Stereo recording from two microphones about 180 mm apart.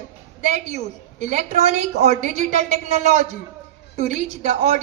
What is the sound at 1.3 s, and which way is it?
A woman's voice, 40° right (ahead or behind).